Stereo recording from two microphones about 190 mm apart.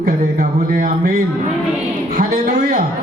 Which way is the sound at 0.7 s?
45° right (ahead or behind).